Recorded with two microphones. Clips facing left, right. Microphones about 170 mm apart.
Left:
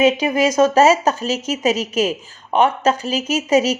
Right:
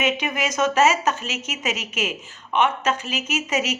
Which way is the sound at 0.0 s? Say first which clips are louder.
Left 9 dB; 35° left (ahead or behind).